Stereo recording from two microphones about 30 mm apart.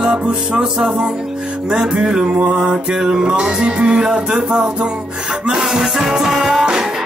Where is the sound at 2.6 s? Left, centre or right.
Centre.